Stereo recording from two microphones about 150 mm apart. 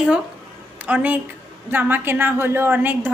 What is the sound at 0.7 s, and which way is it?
A woman's voice, 10° right (ahead or behind).